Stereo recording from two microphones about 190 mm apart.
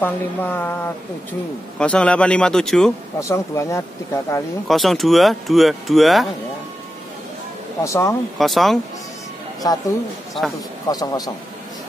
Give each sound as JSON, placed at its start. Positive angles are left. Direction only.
{"t": 0.0, "sound": "speech", "side_deg": 10}
{"t": 3.2, "sound": "speech", "side_deg": 15}
{"t": 4.6, "sound": "speech", "side_deg": 0}
{"t": 7.8, "sound": "speech", "side_deg": 15}
{"t": 8.4, "sound": "speech", "side_deg": 0}
{"t": 9.6, "sound": "speech", "side_deg": 20}
{"t": 10.9, "sound": "speech", "side_deg": 20}